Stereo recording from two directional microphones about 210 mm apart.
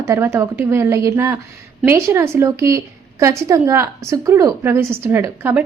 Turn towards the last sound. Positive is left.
turn(degrees=-10)  # may be behind; listen again after turning